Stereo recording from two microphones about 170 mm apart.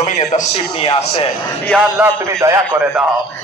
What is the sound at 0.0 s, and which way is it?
A man's voice, 45° left (ahead or behind).